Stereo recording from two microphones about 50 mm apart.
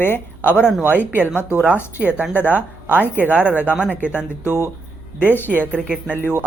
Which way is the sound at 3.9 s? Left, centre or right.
Left.